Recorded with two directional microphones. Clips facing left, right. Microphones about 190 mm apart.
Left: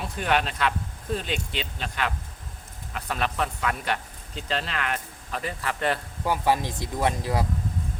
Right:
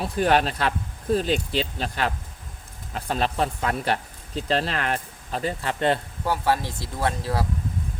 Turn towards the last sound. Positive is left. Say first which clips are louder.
# even
turn(degrees=15)  # may be behind; listen again after turning